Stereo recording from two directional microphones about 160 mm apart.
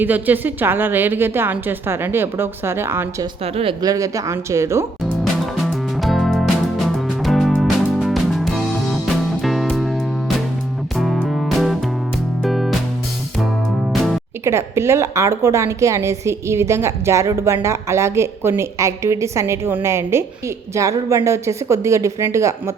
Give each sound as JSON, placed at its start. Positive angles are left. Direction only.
{"t": 0.0, "sound": "a woman's voice", "side_deg": -10}
{"t": 3.4, "sound": "speech", "side_deg": -35}
{"t": 3.8, "sound": "a woman's voice", "side_deg": -20}
{"t": 5.2, "sound": "music", "side_deg": 0}
{"t": 14.4, "sound": "a woman's voice", "side_deg": -15}